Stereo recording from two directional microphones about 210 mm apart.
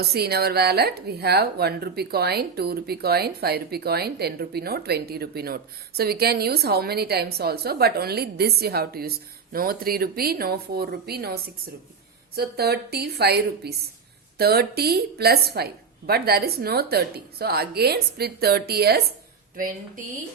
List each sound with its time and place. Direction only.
0.0 s speech: 50° right (ahead or behind)
12.4 s speech: 50° right (ahead or behind)